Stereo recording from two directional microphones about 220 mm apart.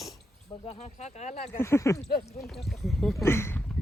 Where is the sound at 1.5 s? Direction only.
10° left (ahead or behind).